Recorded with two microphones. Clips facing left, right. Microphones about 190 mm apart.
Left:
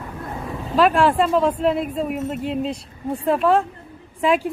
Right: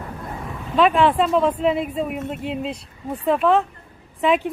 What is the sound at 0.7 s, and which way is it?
Speech, centre (ahead or behind).